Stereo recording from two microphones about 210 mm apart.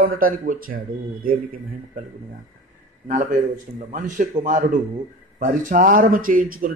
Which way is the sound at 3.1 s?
40° right (ahead or behind).